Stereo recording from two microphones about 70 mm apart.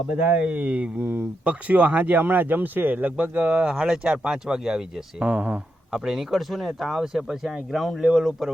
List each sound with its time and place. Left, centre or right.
0.3 s speech: right
5.2 s speech: right
5.9 s speech: centre